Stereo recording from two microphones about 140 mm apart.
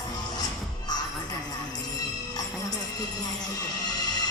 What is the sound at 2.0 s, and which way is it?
Music, 30° left (ahead or behind).